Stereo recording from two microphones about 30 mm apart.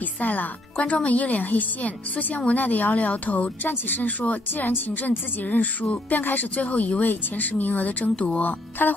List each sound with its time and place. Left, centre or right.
0.2 s speech: left
1.0 s speech: left
3.6 s a woman's voice: left
6.6 s speech: left
8.4 s speech: left